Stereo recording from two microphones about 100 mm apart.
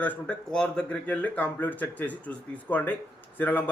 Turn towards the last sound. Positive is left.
turn(degrees=15)  # may be behind; listen again after turning